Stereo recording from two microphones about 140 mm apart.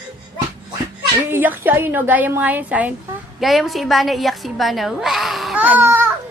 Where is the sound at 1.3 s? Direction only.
15° right (ahead or behind).